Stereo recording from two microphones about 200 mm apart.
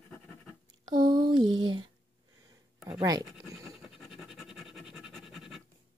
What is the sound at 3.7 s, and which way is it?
Scratch, centre (ahead or behind).